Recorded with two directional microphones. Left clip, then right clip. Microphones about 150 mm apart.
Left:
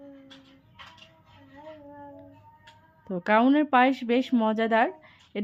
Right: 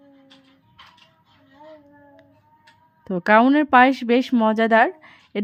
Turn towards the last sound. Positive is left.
turn(degrees=-35)  # may be behind; listen again after turning